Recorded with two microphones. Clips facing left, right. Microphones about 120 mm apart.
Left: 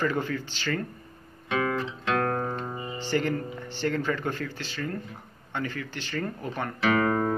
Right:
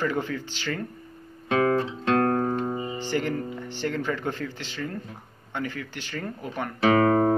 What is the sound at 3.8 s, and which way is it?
Speech, 15° right (ahead or behind).